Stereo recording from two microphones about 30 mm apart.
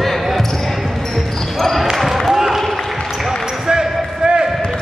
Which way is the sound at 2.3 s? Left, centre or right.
Centre.